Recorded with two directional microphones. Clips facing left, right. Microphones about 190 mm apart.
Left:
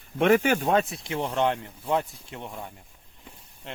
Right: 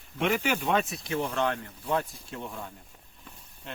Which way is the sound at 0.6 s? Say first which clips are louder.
Left 4 dB; 30° left (ahead or behind).